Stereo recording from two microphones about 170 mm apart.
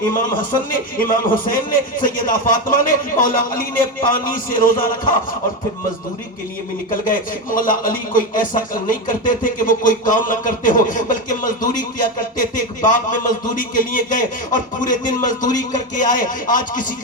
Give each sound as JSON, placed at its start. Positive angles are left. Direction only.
{"t": 0.9, "sound": "speech", "side_deg": 55}
{"t": 7.1, "sound": "speech", "side_deg": 55}